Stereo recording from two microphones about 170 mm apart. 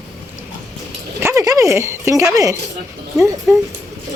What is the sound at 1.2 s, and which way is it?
Dog, 15° right (ahead or behind).